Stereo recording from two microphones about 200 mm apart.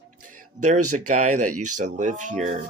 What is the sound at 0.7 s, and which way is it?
Speech, 90° right.